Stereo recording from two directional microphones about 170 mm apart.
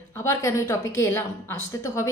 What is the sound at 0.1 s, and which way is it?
A woman's voice, 15° left (ahead or behind).